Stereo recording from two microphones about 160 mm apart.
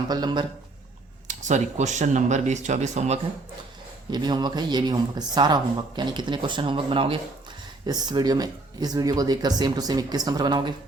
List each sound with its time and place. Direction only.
0.1 s speech: 25° right (ahead or behind)
1.3 s speech: 50° right (ahead or behind)
4.1 s speech: 25° right (ahead or behind)